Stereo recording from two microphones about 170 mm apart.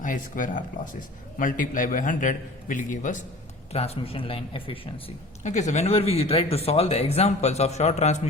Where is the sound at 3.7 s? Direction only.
35° left (ahead or behind).